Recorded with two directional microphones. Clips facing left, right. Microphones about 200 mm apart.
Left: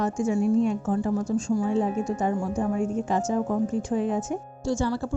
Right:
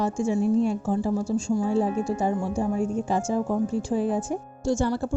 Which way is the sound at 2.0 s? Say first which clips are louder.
Right 1 dB; 30° right (ahead or behind).